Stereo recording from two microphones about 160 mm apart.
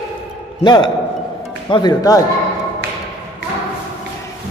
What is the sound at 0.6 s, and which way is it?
A man's voice, 30° left (ahead or behind).